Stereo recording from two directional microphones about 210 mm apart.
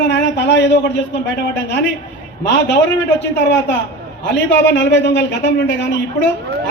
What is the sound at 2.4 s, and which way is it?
A man's voice, 55° left (ahead or behind).